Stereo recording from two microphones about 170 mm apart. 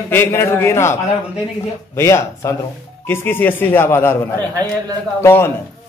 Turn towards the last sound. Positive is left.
turn(degrees=15)  # may be behind; listen again after turning